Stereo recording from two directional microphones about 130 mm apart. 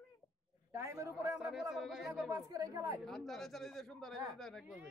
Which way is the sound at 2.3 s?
25° right (ahead or behind).